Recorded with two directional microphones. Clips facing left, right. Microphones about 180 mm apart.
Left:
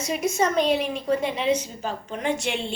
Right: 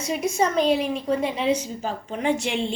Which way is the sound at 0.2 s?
30° right (ahead or behind).